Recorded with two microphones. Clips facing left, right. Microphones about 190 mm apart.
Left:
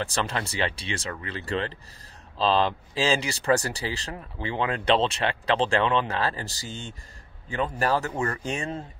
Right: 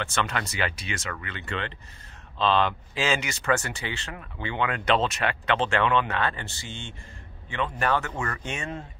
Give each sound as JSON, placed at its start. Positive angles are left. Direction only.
{"t": 0.0, "sound": "a man's voice", "side_deg": 35}